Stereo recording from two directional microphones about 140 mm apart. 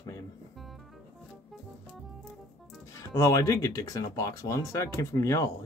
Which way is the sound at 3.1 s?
25° left (ahead or behind).